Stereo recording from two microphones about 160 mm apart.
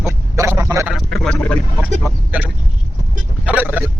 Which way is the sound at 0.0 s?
15° right (ahead or behind).